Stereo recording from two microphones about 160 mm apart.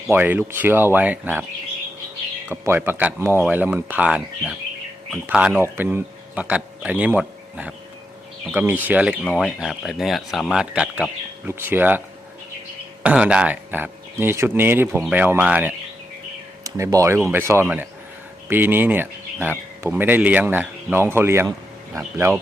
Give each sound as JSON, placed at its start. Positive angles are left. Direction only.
{"t": 0.1, "sound": "speech", "side_deg": -10}
{"t": 2.5, "sound": "speech", "side_deg": -15}